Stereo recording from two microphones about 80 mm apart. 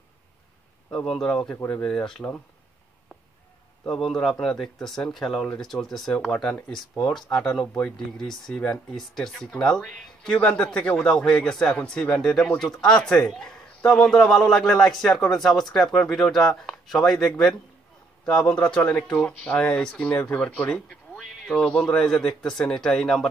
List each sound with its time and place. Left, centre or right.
0.9 s speech: centre
3.9 s speech: centre
6.1 s speech: centre
6.7 s speech: centre
21.2 s speech: centre